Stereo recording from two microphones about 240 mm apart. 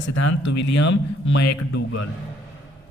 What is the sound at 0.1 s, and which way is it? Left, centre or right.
Speech, left.